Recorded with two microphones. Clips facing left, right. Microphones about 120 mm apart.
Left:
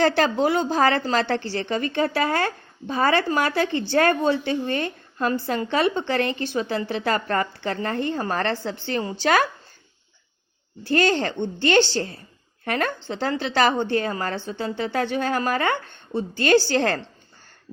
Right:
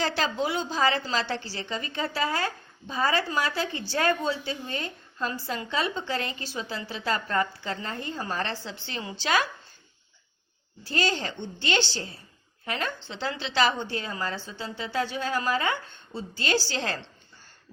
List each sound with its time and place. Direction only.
0.0 s a woman's voice: 55° left (ahead or behind)
10.8 s a woman's voice: 55° left (ahead or behind)